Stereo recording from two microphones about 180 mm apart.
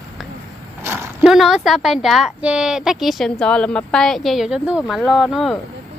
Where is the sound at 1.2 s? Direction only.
Centre (ahead or behind).